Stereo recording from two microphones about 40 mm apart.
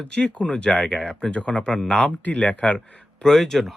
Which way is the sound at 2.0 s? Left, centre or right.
Left.